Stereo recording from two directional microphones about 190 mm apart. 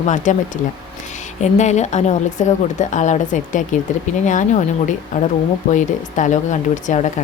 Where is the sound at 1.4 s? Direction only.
35° left (ahead or behind).